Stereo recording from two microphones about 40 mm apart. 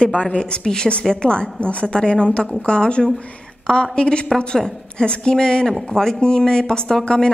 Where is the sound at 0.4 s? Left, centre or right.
Centre.